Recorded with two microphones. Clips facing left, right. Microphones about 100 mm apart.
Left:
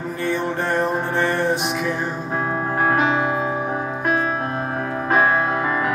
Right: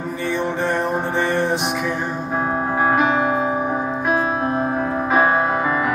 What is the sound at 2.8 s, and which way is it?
Music, 10° right (ahead or behind).